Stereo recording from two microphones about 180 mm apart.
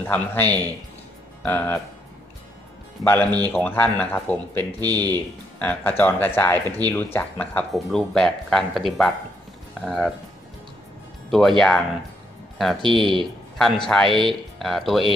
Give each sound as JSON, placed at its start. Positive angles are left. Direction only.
{"t": 0.0, "sound": "speech", "side_deg": 10}
{"t": 3.0, "sound": "speech", "side_deg": 10}
{"t": 11.2, "sound": "speech", "side_deg": 0}
{"t": 12.8, "sound": "speech", "side_deg": -25}
{"t": 13.6, "sound": "speech", "side_deg": 0}